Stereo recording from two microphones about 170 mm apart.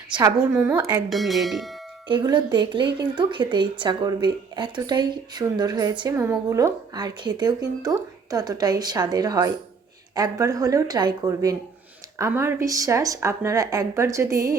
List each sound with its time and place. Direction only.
0.1 s a woman's voice: 20° right (ahead or behind)
0.3 s speech: 5° right (ahead or behind)
2.0 s speech: 25° right (ahead or behind)